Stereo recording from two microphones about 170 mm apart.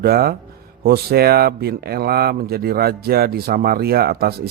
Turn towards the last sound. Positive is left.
turn(degrees=-65)  # may be behind; listen again after turning